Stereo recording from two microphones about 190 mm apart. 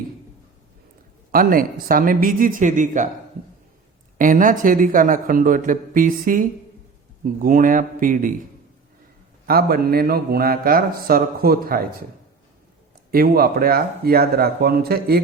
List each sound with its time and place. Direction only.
1.3 s mantra: 50° right (ahead or behind)
4.2 s mantra: 45° right (ahead or behind)
9.5 s mantra: 55° right (ahead or behind)
13.1 s mantra: 50° right (ahead or behind)